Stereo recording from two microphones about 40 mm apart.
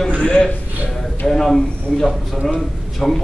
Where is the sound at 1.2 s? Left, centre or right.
Centre.